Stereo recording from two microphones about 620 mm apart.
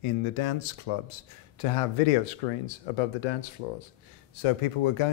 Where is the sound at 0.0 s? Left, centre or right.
Left.